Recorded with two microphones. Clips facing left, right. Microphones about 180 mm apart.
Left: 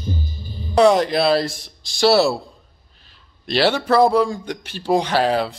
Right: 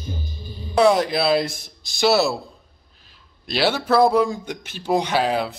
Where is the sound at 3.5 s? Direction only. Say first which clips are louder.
Left 2 dB; 10° right (ahead or behind).